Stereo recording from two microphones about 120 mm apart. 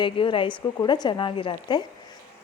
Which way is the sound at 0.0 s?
45° left (ahead or behind).